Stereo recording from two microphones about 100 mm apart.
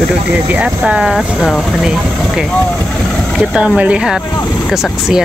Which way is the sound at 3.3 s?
10° right (ahead or behind).